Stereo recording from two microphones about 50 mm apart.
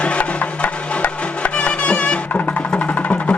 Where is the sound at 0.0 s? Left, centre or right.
Left.